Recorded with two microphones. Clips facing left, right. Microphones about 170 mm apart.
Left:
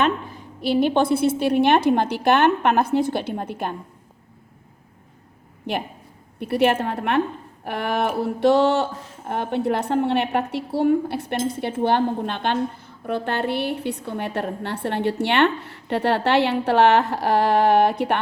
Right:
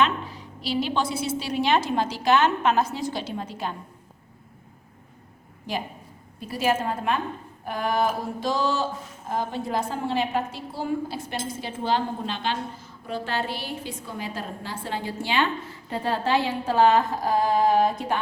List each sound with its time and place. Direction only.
0.0 s speech: 50° left (ahead or behind)
5.7 s speech: 60° left (ahead or behind)